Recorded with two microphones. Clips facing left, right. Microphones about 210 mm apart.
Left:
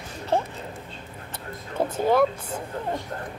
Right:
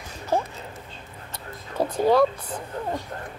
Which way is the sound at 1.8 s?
25° left (ahead or behind).